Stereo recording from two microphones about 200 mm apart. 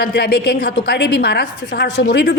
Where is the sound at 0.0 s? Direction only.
55° left (ahead or behind).